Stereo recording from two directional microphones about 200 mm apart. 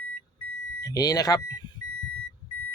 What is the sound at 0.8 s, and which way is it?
Speech, 20° left (ahead or behind).